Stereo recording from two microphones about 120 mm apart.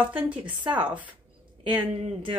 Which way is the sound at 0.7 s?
10° right (ahead or behind).